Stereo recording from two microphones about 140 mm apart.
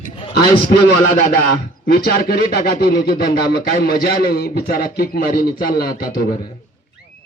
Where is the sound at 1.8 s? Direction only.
90° left.